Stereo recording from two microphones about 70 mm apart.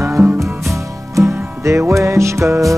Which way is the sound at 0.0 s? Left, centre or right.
Right.